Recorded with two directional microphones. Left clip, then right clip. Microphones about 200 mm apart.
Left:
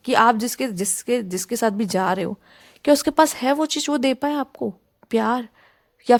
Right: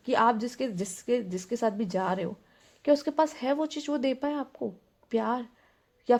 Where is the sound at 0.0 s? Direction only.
35° left (ahead or behind).